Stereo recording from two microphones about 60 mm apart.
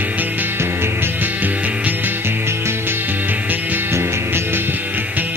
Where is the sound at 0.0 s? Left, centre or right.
Right.